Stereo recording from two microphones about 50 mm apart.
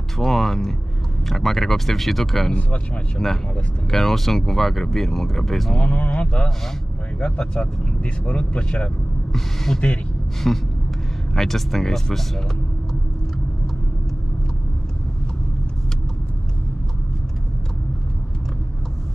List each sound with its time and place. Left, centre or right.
0.2 s speech: centre
5.8 s speech: left
10.4 s a sound: centre
11.3 s speech: centre